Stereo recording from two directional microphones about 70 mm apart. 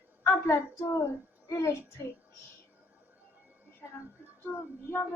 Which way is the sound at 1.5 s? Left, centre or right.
Left.